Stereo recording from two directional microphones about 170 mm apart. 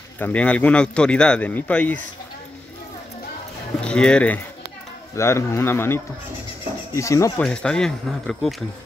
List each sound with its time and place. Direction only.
0.2 s speech: 10° left (ahead or behind)
3.8 s speech: 5° left (ahead or behind)
7.4 s speech: 5° left (ahead or behind)